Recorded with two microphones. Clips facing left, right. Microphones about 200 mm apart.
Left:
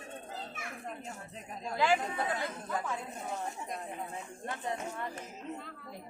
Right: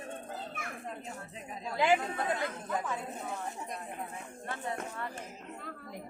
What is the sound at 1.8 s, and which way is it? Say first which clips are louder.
Speech: right 1 dB; 20° right (ahead or behind).